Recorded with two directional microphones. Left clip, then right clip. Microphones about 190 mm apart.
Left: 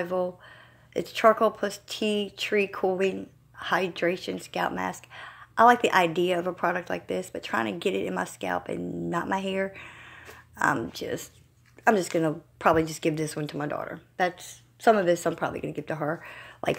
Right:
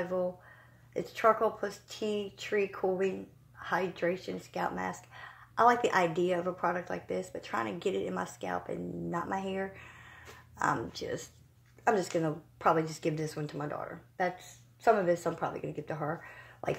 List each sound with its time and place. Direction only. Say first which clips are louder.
0.0 s speech: left 5 dB; 40° left (ahead or behind)